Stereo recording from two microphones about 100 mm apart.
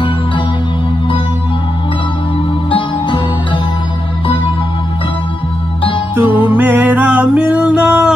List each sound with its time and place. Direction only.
6.1 s music: 20° right (ahead or behind)